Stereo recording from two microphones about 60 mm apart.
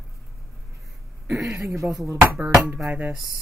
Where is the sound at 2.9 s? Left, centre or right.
Right.